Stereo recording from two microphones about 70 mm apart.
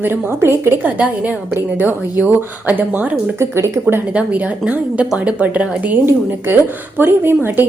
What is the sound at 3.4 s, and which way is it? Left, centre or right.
Speech, right.